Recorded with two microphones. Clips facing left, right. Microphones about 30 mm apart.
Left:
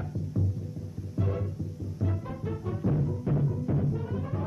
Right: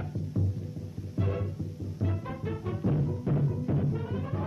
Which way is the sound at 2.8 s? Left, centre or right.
Centre.